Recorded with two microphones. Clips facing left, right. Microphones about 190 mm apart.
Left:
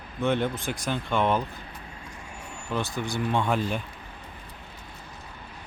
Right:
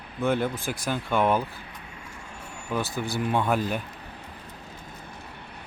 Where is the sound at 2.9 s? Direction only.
5° right (ahead or behind).